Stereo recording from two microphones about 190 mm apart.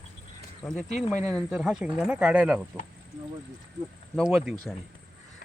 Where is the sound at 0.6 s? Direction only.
Centre (ahead or behind).